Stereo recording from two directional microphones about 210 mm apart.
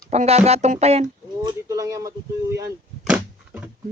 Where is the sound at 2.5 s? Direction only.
10° right (ahead or behind).